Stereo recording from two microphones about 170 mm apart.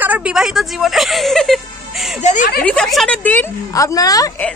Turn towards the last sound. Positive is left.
turn(degrees=20)  # may be behind; listen again after turning